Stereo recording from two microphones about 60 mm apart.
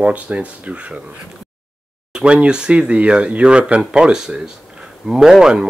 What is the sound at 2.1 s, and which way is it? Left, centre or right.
Speech, centre.